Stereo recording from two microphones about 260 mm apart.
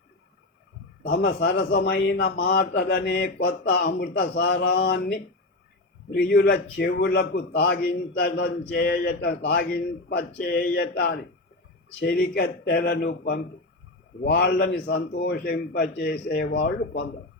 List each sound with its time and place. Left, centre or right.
1.1 s a man's voice: left